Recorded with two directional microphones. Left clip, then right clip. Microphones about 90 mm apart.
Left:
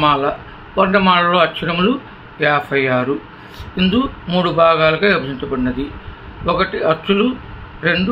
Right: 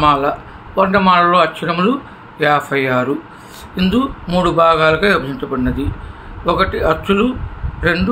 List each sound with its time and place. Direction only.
0.0 s a man's voice: 20° right (ahead or behind)